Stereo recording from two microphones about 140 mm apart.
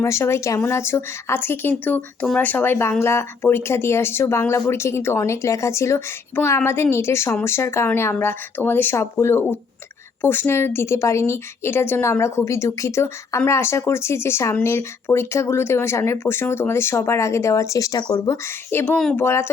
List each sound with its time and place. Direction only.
0.0 s speech: 20° left (ahead or behind)